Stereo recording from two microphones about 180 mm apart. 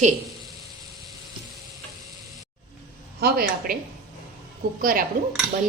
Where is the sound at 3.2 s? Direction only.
55° right (ahead or behind).